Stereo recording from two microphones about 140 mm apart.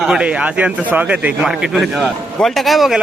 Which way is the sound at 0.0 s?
5° right (ahead or behind).